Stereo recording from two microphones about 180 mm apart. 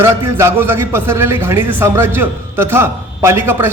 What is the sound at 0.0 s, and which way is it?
A man's voice, 15° right (ahead or behind).